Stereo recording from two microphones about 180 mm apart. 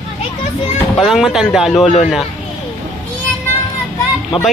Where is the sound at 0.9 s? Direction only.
Centre (ahead or behind).